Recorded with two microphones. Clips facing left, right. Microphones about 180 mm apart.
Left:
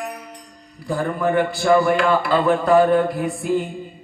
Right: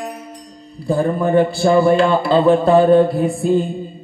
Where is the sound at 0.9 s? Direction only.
30° right (ahead or behind).